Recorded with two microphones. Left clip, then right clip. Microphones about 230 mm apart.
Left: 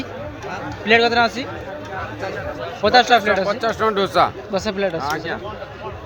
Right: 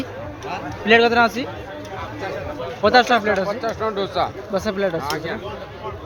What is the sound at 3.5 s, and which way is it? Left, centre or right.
Speech, left.